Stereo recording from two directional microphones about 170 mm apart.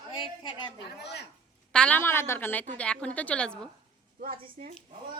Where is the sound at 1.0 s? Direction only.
80° left.